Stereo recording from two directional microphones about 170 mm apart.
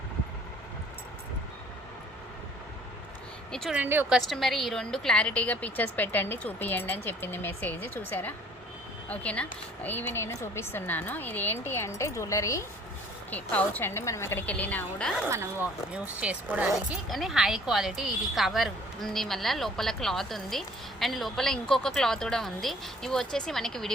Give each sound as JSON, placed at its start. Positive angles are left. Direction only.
{"t": 3.5, "sound": "speech", "side_deg": 0}
{"t": 3.8, "sound": "speech", "side_deg": -10}
{"t": 4.3, "sound": "a woman's voice", "side_deg": 0}
{"t": 15.3, "sound": "speech", "side_deg": -15}